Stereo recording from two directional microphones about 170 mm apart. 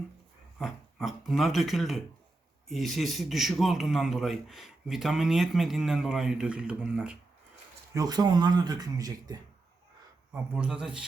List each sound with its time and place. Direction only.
0.6 s a man's voice: centre (ahead or behind)
7.9 s speech: 25° right (ahead or behind)
10.3 s speech: 5° right (ahead or behind)